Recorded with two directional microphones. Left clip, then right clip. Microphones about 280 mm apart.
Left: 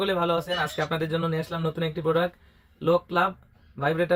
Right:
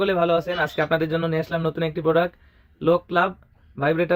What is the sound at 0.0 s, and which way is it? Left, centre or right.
Speech, right.